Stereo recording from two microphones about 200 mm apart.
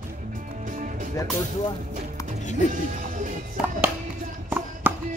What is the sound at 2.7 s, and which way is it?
Music, 40° right (ahead or behind).